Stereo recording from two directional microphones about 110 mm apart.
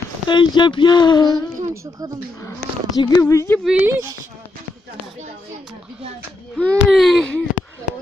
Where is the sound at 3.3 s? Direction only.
30° left (ahead or behind).